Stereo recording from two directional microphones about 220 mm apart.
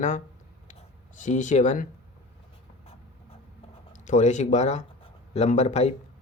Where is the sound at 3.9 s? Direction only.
35° left (ahead or behind).